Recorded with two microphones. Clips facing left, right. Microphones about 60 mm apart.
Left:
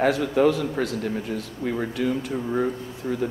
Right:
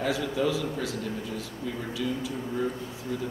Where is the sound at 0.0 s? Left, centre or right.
Left.